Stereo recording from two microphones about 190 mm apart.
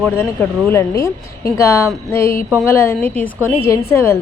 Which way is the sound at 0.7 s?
15° left (ahead or behind).